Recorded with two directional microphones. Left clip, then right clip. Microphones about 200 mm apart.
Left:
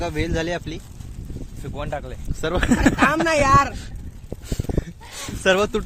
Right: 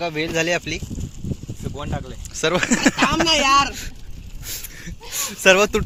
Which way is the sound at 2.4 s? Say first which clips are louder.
Right 2 dB; 15° right (ahead or behind).